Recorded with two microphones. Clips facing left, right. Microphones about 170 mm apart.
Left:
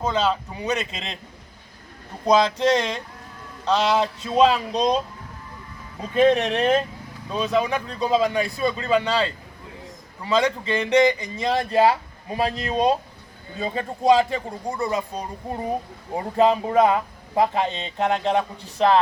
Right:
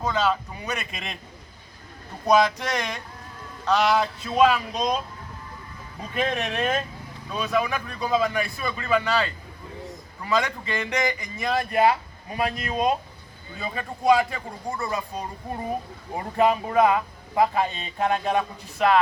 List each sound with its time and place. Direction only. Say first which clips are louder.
0.0 s speech: left 2 dB; 25° left (ahead or behind)
2.6 s speech: left 8 dB; 25° left (ahead or behind)
6.0 s speech: left 9 dB; 25° left (ahead or behind)